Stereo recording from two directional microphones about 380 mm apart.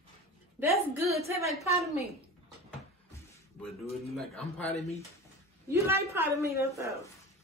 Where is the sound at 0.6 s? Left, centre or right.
Centre.